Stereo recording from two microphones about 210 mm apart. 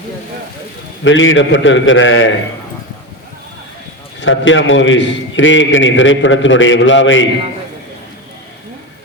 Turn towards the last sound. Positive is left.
turn(degrees=65)  # may be behind; listen again after turning